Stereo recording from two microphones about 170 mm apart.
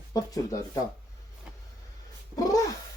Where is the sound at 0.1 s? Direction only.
20° left (ahead or behind).